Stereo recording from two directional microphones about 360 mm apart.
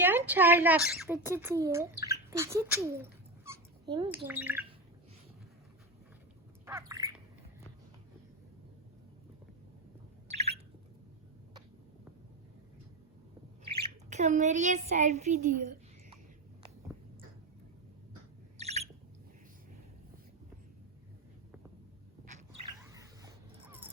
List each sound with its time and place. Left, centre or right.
0.0 s speech: centre
6.7 s squawk: centre
10.2 s squawk: centre
13.8 s speech: centre
18.5 s bird: centre
23.0 s dog: centre